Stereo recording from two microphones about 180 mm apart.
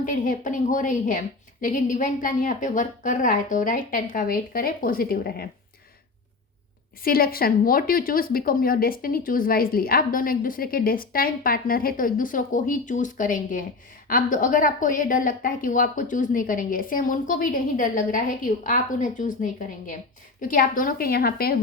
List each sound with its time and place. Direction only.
0.0 s speech: 45° left (ahead or behind)
7.0 s speech: 55° left (ahead or behind)